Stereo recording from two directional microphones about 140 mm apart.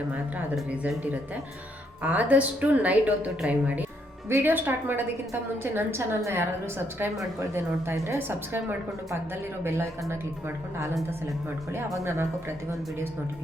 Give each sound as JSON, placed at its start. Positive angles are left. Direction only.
{"t": 0.5, "sound": "a woman's voice", "side_deg": -10}
{"t": 12.0, "sound": "speech", "side_deg": -20}